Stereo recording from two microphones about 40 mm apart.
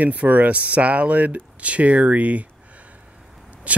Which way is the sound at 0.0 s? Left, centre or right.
Right.